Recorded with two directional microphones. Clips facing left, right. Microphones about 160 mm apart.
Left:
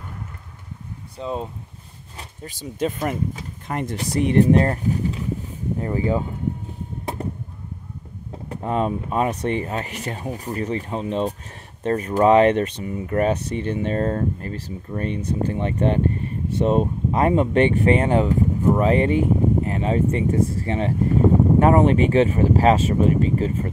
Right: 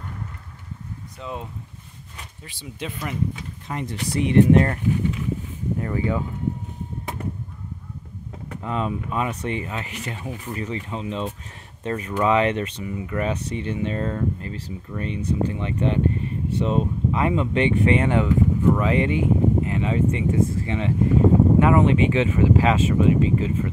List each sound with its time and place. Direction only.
1.1 s speech: 30° left (ahead or behind)
2.1 s speech: 40° left (ahead or behind)
7.2 s honk: 30° left (ahead or behind)
8.5 s speech: 40° left (ahead or behind)